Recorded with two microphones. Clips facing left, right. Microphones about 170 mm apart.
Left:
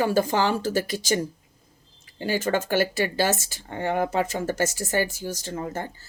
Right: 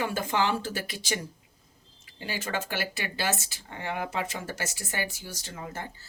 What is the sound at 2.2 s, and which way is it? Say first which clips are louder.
Speech: left 9 dB; 45° left (ahead or behind).